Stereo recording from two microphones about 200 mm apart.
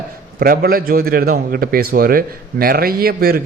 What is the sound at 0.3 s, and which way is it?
A man's voice, 45° right (ahead or behind).